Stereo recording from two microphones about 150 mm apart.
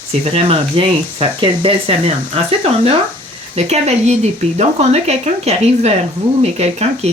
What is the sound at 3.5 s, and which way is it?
Speech, 45° right (ahead or behind).